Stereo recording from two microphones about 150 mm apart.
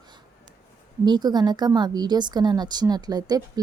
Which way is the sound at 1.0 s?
30° right (ahead or behind).